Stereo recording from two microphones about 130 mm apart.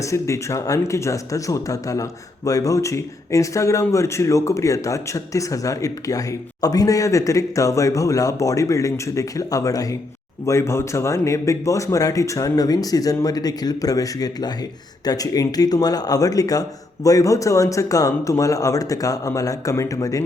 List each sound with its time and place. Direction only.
0.0 s speech: 25° left (ahead or behind)